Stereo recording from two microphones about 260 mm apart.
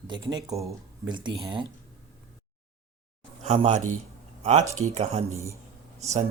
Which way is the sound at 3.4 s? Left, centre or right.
Right.